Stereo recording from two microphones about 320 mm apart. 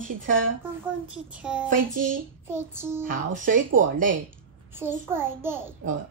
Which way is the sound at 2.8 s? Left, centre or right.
Centre.